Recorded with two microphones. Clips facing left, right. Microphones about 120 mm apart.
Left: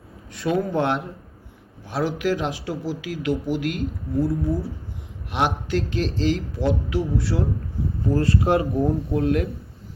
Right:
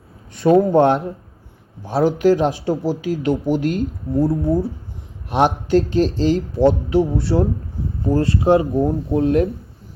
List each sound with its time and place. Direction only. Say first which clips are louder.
0.3 s speech: right 9 dB; 40° right (ahead or behind)
5.6 s speech: right 8 dB; 35° right (ahead or behind)